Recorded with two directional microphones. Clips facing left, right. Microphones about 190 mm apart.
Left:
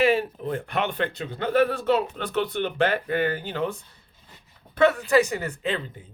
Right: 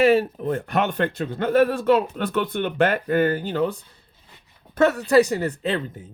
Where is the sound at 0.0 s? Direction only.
40° right (ahead or behind).